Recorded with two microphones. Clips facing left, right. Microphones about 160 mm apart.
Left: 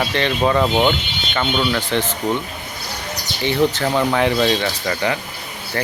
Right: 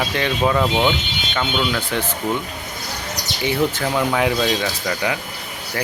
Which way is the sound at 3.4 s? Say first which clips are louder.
Left 3 dB; 5° right (ahead or behind).